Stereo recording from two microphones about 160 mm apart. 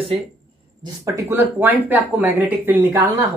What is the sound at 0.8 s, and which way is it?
A woman's voice, 20° right (ahead or behind).